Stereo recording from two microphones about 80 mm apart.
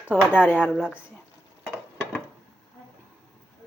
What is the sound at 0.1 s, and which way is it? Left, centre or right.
Speech, centre.